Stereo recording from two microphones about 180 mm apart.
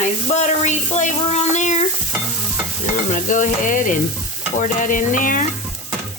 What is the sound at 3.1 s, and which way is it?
Stir, 45° left (ahead or behind).